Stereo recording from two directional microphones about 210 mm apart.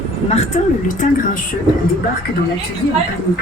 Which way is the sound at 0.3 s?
30° left (ahead or behind).